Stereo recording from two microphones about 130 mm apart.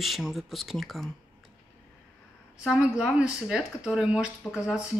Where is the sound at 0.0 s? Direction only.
Centre (ahead or behind).